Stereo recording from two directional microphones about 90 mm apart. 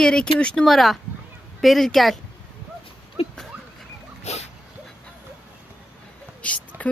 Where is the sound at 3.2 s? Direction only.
90° left.